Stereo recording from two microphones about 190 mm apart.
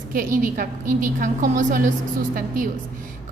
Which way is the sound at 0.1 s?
45° right (ahead or behind).